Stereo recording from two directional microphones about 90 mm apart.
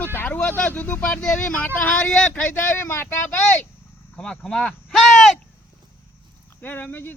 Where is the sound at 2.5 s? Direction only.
25° left (ahead or behind).